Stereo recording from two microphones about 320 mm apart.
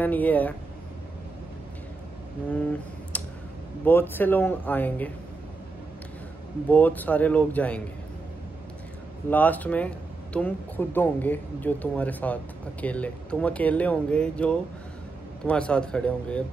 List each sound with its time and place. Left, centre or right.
0.0 s speech: centre
2.5 s speech: centre
6.7 s speech: centre
9.3 s speech: centre